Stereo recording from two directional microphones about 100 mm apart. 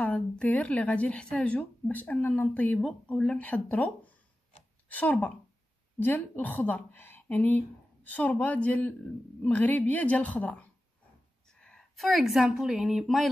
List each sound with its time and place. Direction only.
0.0 s speech: 10° left (ahead or behind)
11.6 s a woman's voice: 5° left (ahead or behind)